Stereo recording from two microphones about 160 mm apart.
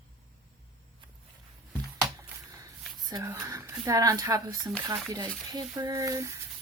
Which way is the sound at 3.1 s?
25° right (ahead or behind).